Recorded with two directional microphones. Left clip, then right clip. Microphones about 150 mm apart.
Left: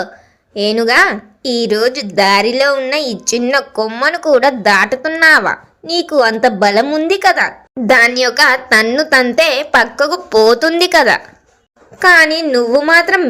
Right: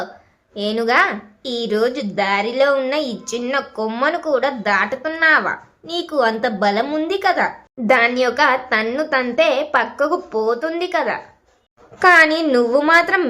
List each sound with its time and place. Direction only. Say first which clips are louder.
0.5 s speech: left 6 dB; 30° left (ahead or behind)